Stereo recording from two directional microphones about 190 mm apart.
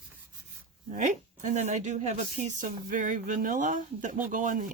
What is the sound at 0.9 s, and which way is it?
A woman's voice, 40° right (ahead or behind).